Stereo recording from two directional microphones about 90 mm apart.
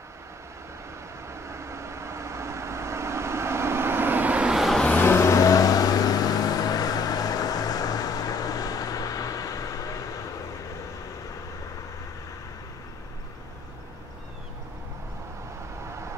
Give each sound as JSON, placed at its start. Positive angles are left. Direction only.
{"t": 1.2, "sound": "vehicle", "side_deg": -30}
{"t": 4.8, "sound": "vehicle", "side_deg": 20}
{"t": 5.1, "sound": "vehicle", "side_deg": 35}